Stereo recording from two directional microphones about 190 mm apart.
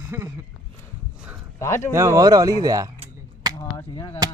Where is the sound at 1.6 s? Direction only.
15° left (ahead or behind).